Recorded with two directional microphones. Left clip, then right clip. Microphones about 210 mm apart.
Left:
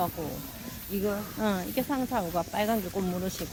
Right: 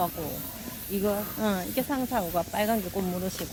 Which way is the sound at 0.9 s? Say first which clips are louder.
Right 2 dB; 35° right (ahead or behind).